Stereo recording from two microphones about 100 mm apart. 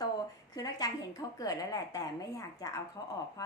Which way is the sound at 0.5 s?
40° left (ahead or behind).